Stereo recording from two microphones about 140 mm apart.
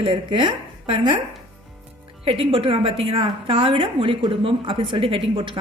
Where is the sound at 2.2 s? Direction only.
40° right (ahead or behind).